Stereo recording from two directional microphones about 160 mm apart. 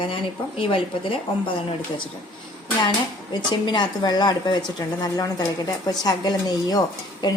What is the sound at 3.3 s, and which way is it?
Speech, 25° left (ahead or behind).